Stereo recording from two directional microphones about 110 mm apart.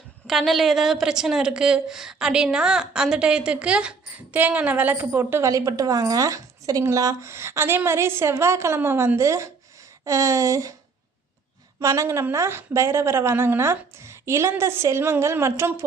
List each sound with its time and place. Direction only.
0.3 s a woman's voice: centre (ahead or behind); by 5.5 s 20° right (ahead or behind)
5.5 s speech: 30° right (ahead or behind)
11.8 s speech: 30° right (ahead or behind)